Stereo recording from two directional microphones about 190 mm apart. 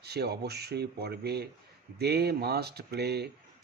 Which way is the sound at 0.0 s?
60° right (ahead or behind).